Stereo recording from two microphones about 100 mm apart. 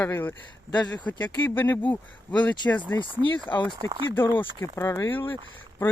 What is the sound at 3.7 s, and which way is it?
Speech, 50° right (ahead or behind).